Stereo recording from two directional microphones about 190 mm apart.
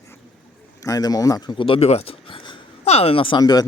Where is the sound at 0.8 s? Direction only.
20° left (ahead or behind).